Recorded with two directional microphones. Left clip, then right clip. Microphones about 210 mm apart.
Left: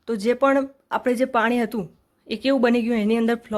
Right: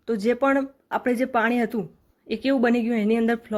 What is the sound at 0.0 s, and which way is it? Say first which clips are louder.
Speech: left 2 dB; centre (ahead or behind).